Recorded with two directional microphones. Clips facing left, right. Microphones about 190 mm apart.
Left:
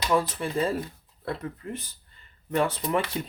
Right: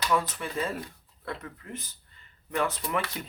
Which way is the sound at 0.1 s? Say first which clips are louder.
Left 5 dB; 30° left (ahead or behind).